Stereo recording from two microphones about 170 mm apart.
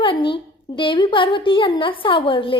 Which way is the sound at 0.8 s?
30° left (ahead or behind).